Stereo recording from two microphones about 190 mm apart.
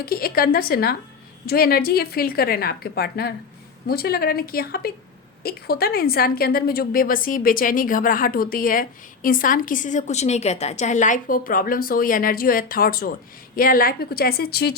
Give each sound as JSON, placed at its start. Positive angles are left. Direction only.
{"t": 0.0, "sound": "a woman's voice", "side_deg": 50}